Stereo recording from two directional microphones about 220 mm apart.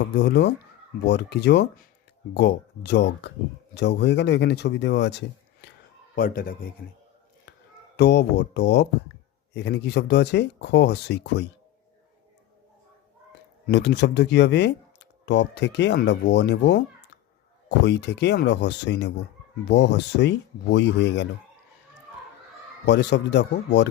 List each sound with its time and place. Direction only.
0.2 s speech: 50° left (ahead or behind)
6.1 s speech: 40° left (ahead or behind)
7.9 s speech: 50° left (ahead or behind)
13.7 s speech: 50° left (ahead or behind)
22.9 s speech: 50° left (ahead or behind)